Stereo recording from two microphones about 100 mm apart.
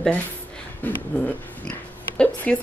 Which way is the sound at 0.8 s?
15° left (ahead or behind).